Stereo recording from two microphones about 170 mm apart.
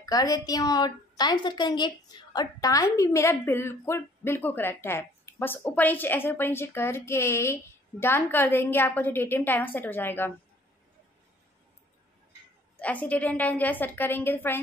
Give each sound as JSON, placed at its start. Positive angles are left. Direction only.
{"t": 0.0, "sound": "a woman's voice", "side_deg": 20}
{"t": 12.7, "sound": "a woman's voice", "side_deg": 10}